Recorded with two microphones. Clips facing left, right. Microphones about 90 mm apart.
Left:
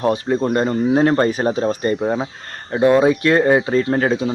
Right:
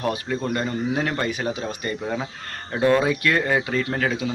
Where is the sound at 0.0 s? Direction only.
30° left (ahead or behind).